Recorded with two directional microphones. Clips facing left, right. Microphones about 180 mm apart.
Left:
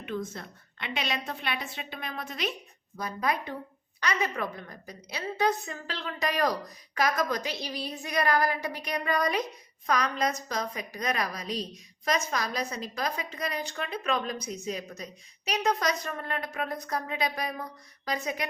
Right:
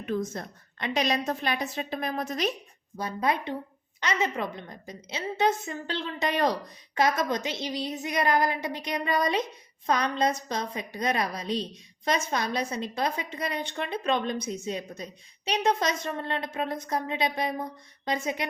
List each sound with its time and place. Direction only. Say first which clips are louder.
0.0 s a woman's voice: right 4 dB; 40° right (ahead or behind)
3.0 s a woman's voice: right 2 dB; 25° right (ahead or behind)